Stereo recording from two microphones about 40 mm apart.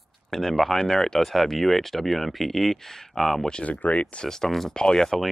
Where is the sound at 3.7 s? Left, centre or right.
Left.